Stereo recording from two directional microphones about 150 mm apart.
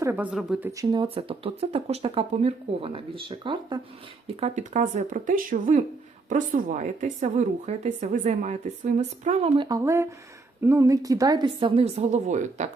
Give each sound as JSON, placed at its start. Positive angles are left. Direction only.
{"t": 0.0, "sound": "speech", "side_deg": -15}
{"t": 0.8, "sound": "speech", "side_deg": -30}
{"t": 4.3, "sound": "speech", "side_deg": -45}
{"t": 9.6, "sound": "speech", "side_deg": -25}